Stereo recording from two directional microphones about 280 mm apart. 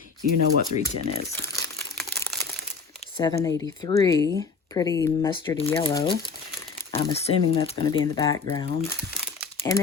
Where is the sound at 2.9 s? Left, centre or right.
Centre.